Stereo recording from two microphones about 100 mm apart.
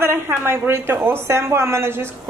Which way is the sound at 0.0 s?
25° right (ahead or behind).